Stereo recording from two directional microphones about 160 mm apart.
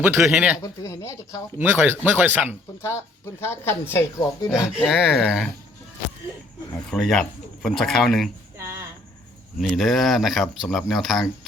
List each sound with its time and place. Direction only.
0.0 s speech: 10° right (ahead or behind)
0.6 s speech: 20° left (ahead or behind)
1.5 s speech: 10° right (ahead or behind)
2.8 s speech: 15° left (ahead or behind)
4.8 s speech: centre (ahead or behind)
6.9 s speech: 5° left (ahead or behind)
9.6 s speech: centre (ahead or behind)